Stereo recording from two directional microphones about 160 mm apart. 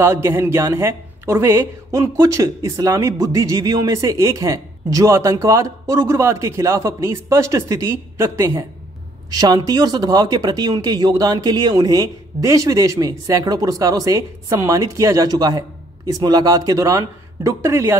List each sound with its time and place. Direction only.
0.0 s speech: 15° right (ahead or behind)